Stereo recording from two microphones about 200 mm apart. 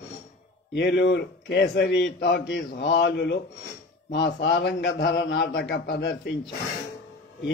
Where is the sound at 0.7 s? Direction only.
60° left (ahead or behind).